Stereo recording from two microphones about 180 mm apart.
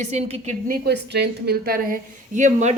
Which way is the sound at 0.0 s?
40° right (ahead or behind).